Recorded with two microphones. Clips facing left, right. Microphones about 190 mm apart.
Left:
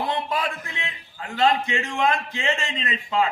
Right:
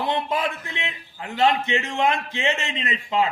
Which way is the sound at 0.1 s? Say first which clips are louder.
Right 2 dB; 20° right (ahead or behind).